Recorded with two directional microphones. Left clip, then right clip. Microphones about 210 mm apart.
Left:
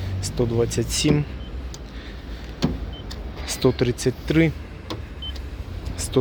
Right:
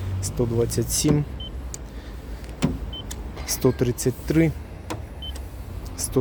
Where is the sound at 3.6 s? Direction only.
20° right (ahead or behind).